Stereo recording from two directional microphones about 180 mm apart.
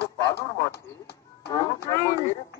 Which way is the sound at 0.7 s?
65° left (ahead or behind).